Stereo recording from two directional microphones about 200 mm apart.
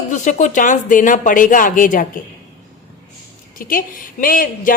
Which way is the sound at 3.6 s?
45° left (ahead or behind).